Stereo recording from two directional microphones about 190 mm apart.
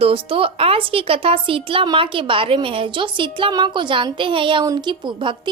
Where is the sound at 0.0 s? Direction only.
30° right (ahead or behind).